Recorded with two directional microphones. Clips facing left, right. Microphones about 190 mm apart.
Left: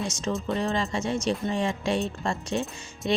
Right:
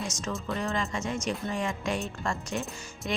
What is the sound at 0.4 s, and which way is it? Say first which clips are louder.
Speech: left 3 dB; 30° left (ahead or behind).